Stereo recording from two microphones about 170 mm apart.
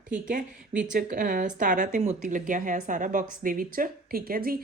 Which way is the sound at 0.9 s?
50° right (ahead or behind).